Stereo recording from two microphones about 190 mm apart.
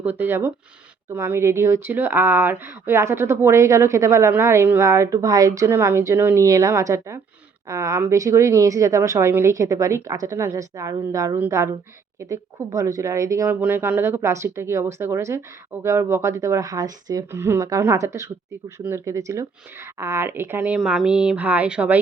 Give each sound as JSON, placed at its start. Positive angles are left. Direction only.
{"t": 0.0, "sound": "speech", "side_deg": -10}